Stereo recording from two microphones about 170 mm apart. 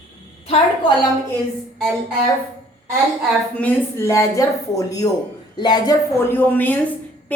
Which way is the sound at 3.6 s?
10° left (ahead or behind).